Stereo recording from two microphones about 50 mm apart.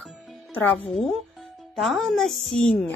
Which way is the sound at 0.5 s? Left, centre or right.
Left.